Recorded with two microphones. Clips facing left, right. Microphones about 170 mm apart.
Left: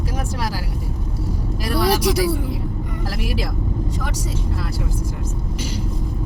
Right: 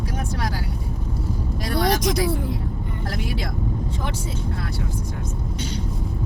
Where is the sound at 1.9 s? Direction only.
5° left (ahead or behind).